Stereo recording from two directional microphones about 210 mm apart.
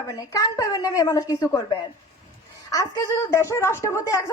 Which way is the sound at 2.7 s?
15° left (ahead or behind).